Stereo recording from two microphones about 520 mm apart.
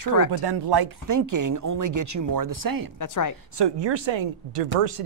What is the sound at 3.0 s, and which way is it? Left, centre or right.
Speech, left.